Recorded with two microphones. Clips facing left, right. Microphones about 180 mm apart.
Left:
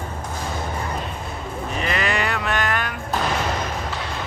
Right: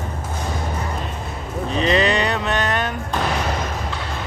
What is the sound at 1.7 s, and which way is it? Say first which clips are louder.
Livestock: right 6 dB; 25° right (ahead or behind).